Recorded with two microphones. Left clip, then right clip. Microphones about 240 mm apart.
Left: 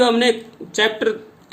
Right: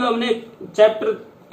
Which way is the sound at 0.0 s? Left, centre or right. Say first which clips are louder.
Left 4 dB; left.